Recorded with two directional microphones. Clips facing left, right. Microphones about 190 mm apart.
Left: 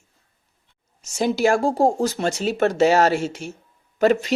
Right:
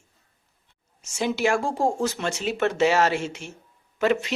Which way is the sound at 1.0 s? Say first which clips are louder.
Left 4 dB; 40° left (ahead or behind).